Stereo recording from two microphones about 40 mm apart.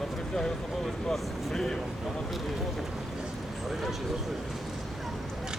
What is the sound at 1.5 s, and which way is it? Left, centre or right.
Speech, centre.